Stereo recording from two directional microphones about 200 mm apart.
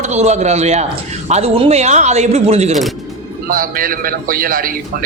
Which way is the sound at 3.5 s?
45° right (ahead or behind).